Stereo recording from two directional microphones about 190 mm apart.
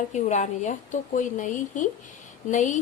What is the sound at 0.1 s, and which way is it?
Speech, 40° left (ahead or behind).